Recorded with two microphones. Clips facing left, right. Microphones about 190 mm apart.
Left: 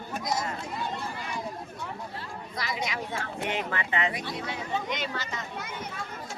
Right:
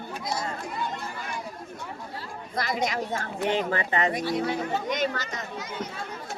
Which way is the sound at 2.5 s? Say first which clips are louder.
Right 6 dB; 50° right (ahead or behind).